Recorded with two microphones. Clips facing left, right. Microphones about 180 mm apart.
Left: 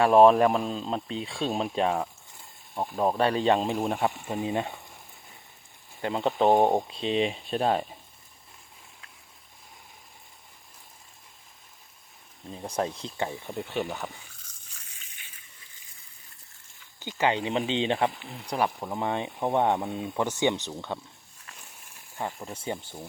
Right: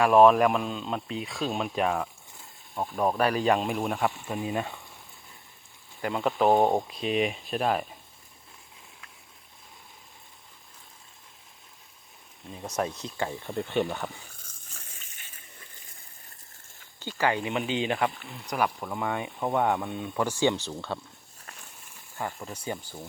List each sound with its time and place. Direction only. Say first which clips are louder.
0.0 s speech: left 1 dB; 30° left (ahead or behind)
2.7 s speech: left 1 dB; 15° left (ahead or behind)
3.2 s speech: left 1 dB; 25° left (ahead or behind)
6.0 s speech: left 1 dB; 25° left (ahead or behind)
12.5 s speech: left 1 dB; 30° left (ahead or behind)
13.5 s speech: right 3 dB; centre (ahead or behind)
14.7 s a sound: right 4 dB; 45° right (ahead or behind)
17.0 s speech: left 1 dB; 20° left (ahead or behind)
22.2 s speech: left 1 dB; 20° left (ahead or behind)